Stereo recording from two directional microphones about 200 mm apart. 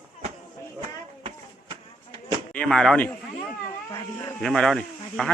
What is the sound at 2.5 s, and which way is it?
Speech, 5° left (ahead or behind).